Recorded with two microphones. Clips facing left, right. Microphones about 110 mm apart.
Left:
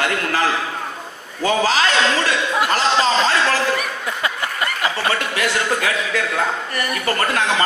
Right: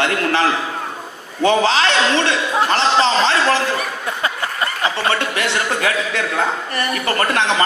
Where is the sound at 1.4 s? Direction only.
25° right (ahead or behind).